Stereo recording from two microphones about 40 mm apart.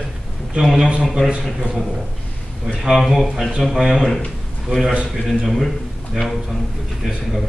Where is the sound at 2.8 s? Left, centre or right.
Centre.